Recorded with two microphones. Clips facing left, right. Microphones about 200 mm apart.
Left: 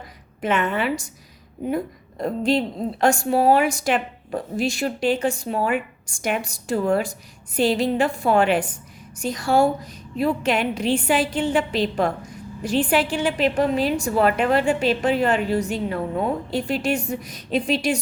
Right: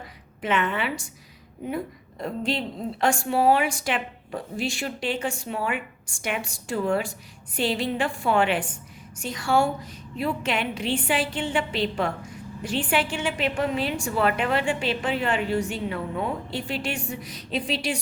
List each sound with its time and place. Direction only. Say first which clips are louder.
0.4 s a woman's voice: left 4 dB; 45° left (ahead or behind)